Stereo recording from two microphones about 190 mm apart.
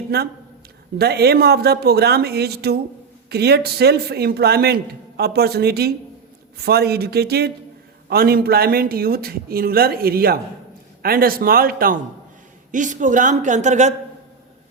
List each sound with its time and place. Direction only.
0.1 s a man's voice: 55° right (ahead or behind); by 13.9 s 40° right (ahead or behind)